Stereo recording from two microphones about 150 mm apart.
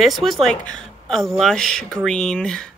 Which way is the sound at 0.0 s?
Centre (ahead or behind).